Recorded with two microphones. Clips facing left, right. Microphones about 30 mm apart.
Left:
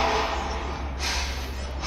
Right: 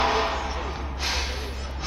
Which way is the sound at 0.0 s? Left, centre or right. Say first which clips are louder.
Right 1 dB; centre.